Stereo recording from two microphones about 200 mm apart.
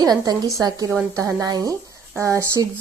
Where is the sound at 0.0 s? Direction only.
20° right (ahead or behind).